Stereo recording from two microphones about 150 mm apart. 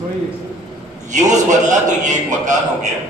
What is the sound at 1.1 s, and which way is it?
A man's voice, 55° right (ahead or behind).